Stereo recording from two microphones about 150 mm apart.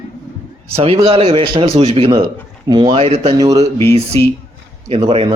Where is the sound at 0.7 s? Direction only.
40° right (ahead or behind).